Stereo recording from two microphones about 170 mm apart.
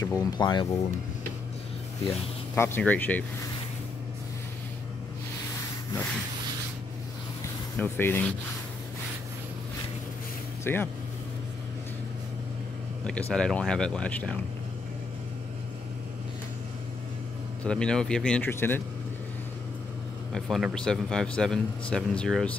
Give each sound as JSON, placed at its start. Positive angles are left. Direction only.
{"t": 0.2, "sound": "speech", "side_deg": 25}
{"t": 2.0, "sound": "speech", "side_deg": 15}
{"t": 7.7, "sound": "speech", "side_deg": 10}
{"t": 10.6, "sound": "speech", "side_deg": 10}
{"t": 13.0, "sound": "speech", "side_deg": 5}
{"t": 17.6, "sound": "speech", "side_deg": 5}
{"t": 20.3, "sound": "speech", "side_deg": 0}